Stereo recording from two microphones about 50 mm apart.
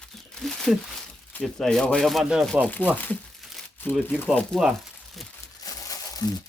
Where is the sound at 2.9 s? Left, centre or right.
Left.